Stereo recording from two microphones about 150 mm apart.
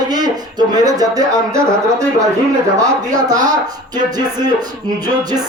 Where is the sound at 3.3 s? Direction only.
25° right (ahead or behind).